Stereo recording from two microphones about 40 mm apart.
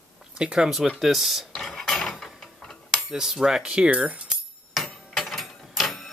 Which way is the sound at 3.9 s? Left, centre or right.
Right.